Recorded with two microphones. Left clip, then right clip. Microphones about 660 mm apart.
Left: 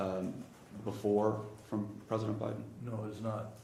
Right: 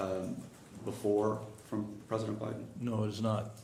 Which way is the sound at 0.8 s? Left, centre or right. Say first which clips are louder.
Even; left.